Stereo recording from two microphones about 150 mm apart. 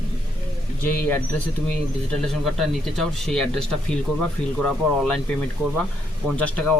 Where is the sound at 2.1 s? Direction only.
Centre (ahead or behind).